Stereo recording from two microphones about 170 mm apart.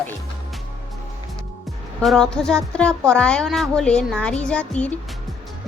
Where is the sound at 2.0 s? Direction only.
Centre (ahead or behind).